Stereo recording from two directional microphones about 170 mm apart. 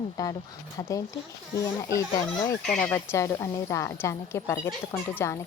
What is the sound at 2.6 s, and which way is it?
Speech, 5° left (ahead or behind).